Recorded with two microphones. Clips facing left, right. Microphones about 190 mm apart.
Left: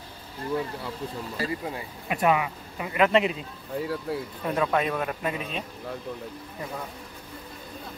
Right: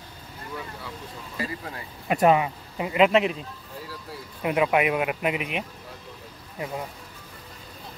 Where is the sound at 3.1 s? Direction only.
Centre (ahead or behind).